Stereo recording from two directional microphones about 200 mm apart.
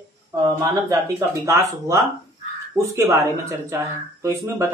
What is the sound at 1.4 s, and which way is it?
Speech, 15° right (ahead or behind).